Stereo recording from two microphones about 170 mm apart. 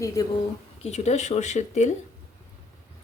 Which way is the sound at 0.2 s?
20° left (ahead or behind).